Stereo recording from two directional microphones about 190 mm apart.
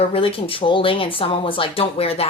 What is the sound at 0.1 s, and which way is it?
Speech, 30° left (ahead or behind).